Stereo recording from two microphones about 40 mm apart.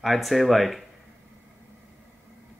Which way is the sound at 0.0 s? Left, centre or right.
Centre.